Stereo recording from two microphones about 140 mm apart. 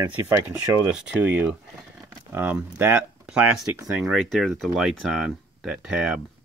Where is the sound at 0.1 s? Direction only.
15° right (ahead or behind).